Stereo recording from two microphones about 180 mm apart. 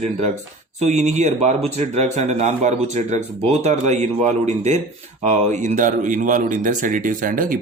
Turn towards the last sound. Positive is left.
turn(degrees=-50)  # may be behind; listen again after turning